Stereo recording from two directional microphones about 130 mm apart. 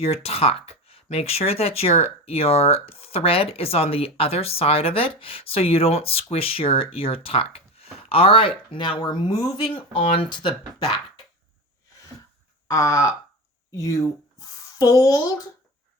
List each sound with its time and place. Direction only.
0.0 s speech: 50° left (ahead or behind)
12.6 s speech: 25° left (ahead or behind)